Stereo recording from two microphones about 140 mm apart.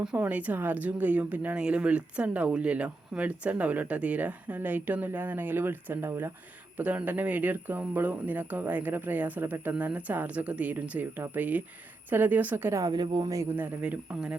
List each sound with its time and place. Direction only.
0.0 s speech: 10° right (ahead or behind)
12.8 s speech: 30° right (ahead or behind)
13.6 s speech: 10° right (ahead or behind)